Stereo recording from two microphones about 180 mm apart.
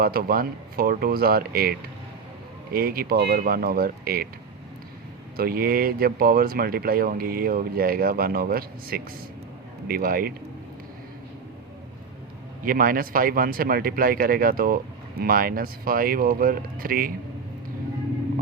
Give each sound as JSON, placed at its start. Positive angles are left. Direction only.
{"t": 0.0, "sound": "speech", "side_deg": -55}
{"t": 5.4, "sound": "speech", "side_deg": -55}
{"t": 12.6, "sound": "speech", "side_deg": -50}